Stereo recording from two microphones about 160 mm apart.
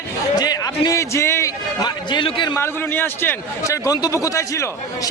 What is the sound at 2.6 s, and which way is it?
A man's voice, 15° left (ahead or behind).